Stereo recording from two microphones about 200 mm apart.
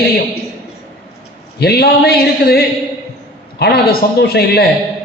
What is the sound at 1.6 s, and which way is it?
A man's voice, 50° left (ahead or behind).